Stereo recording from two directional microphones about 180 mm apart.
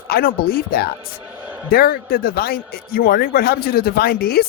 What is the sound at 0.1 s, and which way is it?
Speech, 55° left (ahead or behind).